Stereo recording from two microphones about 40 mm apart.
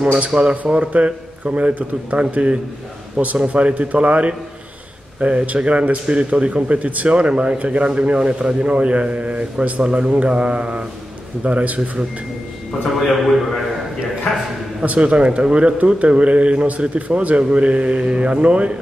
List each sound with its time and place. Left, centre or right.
0.0 s a man's voice: right
13.1 s a man's voice: centre
14.9 s a man's voice: right